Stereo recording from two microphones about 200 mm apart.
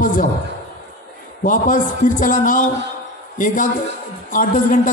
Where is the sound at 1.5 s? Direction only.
40° left (ahead or behind).